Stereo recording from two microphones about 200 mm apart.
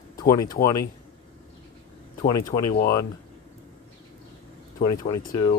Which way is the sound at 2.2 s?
20° left (ahead or behind).